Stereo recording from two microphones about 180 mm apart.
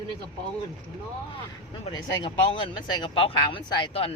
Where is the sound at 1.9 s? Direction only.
30° left (ahead or behind).